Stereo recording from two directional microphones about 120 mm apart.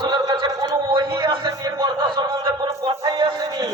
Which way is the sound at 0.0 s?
35° right (ahead or behind).